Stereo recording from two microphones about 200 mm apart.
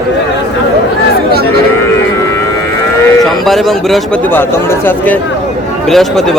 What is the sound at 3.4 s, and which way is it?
Speech, centre (ahead or behind).